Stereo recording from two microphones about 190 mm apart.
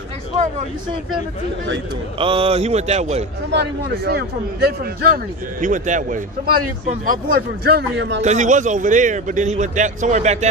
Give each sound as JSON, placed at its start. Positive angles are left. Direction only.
{"t": 2.1, "sound": "a man's voice", "side_deg": -30}
{"t": 3.5, "sound": "a man's voice", "side_deg": -60}
{"t": 8.2, "sound": "a man's voice", "side_deg": -40}